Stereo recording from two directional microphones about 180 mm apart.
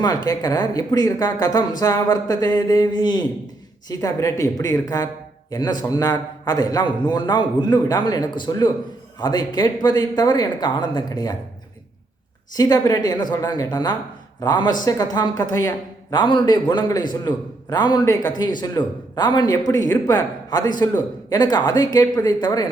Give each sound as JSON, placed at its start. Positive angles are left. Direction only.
{"t": 0.0, "sound": "a man's voice", "side_deg": 20}
{"t": 12.5, "sound": "a man's voice", "side_deg": 20}